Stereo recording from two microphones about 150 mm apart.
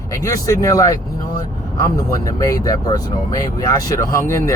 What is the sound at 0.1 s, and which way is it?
Speech, 20° left (ahead or behind).